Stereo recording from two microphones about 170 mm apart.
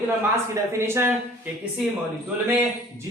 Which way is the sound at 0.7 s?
15° right (ahead or behind).